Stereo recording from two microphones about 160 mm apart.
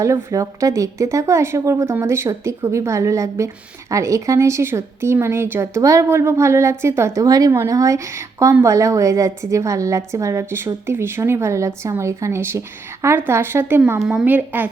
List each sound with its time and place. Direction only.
0.0 s speech: 20° right (ahead or behind)